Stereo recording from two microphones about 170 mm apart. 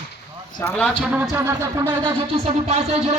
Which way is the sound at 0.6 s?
10° left (ahead or behind).